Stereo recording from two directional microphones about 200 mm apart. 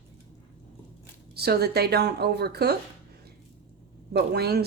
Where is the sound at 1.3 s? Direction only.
50° right (ahead or behind).